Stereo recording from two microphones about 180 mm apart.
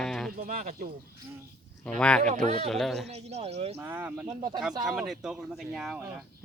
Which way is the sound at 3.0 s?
35° right (ahead or behind).